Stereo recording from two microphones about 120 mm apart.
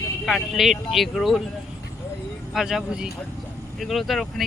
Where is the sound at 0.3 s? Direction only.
Centre (ahead or behind).